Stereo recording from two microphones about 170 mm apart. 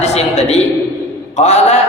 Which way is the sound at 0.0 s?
40° left (ahead or behind).